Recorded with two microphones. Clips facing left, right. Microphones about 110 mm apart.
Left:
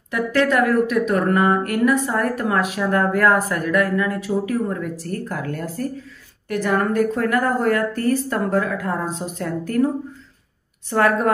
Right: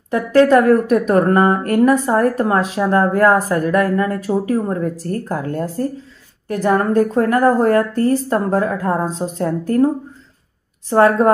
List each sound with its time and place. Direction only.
0.1 s speech: 35° right (ahead or behind)
10.9 s speech: 30° right (ahead or behind)